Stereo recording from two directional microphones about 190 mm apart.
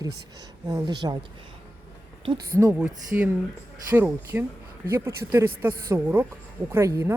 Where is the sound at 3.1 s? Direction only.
10° right (ahead or behind).